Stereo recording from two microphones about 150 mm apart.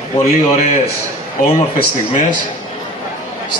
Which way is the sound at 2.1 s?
60° left (ahead or behind).